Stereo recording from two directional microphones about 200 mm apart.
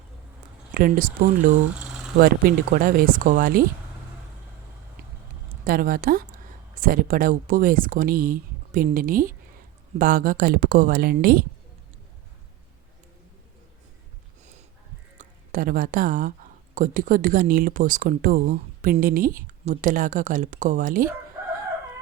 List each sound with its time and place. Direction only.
0.7 s speech: 45° right (ahead or behind)
5.6 s speech: 45° right (ahead or behind)
15.2 s speech: 45° right (ahead or behind)